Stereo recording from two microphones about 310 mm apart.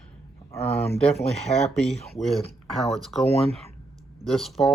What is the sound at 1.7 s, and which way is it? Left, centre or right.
Speech, centre.